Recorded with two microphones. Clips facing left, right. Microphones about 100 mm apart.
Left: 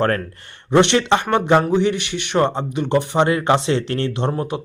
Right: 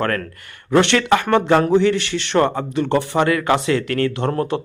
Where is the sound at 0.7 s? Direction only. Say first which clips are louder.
Even; 20° left (ahead or behind).